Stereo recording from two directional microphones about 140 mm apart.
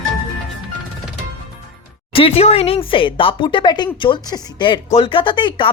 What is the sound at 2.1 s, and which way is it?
Speech, 45° left (ahead or behind).